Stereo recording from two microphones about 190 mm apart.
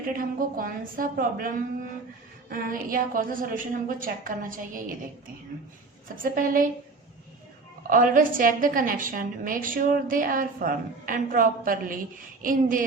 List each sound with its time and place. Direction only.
0.2 s a woman's voice: 50° right (ahead or behind)
6.2 s a woman's voice: 45° right (ahead or behind)
7.9 s a woman's voice: 45° right (ahead or behind)